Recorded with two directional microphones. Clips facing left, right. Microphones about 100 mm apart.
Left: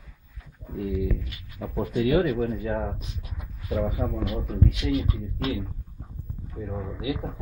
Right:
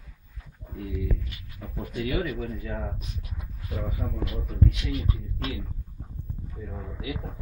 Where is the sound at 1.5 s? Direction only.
45° left (ahead or behind).